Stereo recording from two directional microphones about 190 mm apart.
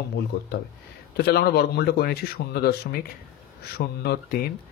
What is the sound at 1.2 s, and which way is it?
Speech, 60° left (ahead or behind).